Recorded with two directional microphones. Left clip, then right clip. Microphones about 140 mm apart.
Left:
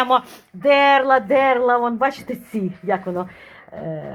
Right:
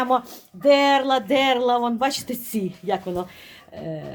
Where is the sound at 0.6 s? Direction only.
15° right (ahead or behind).